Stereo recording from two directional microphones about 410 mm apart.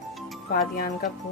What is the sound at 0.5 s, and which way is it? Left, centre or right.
Speech, left.